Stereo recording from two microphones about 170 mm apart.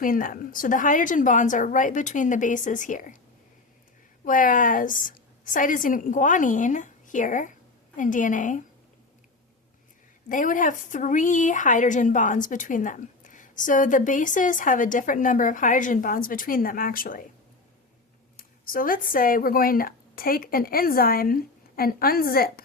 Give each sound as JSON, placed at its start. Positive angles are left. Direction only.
{"t": 0.0, "sound": "a woman's voice", "side_deg": 55}
{"t": 4.3, "sound": "a woman's voice", "side_deg": 50}
{"t": 10.2, "sound": "a woman's voice", "side_deg": 50}
{"t": 18.3, "sound": "speech", "side_deg": 55}